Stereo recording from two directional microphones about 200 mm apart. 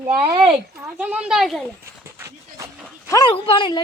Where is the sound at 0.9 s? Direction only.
5° right (ahead or behind).